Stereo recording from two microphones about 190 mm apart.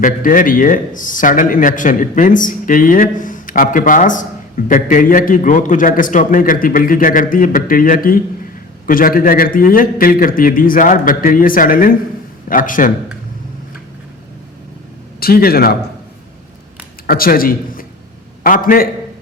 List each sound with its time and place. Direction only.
0.0 s a man's voice: 45° left (ahead or behind)
15.2 s a man's voice: 50° left (ahead or behind)
17.1 s a man's voice: 50° left (ahead or behind)